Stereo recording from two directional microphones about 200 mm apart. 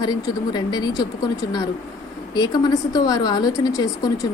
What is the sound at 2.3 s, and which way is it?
A woman's voice, 20° left (ahead or behind).